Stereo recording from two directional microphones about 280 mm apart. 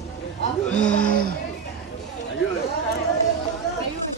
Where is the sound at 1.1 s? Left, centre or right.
Right.